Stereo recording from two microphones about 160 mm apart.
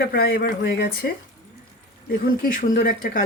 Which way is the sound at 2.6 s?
60° left (ahead or behind).